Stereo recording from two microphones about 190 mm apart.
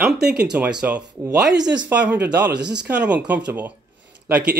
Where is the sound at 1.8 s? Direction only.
10° right (ahead or behind).